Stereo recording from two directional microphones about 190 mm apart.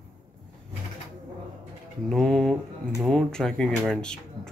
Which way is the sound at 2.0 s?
Centre (ahead or behind).